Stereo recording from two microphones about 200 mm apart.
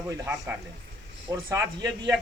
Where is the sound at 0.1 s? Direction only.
15° right (ahead or behind).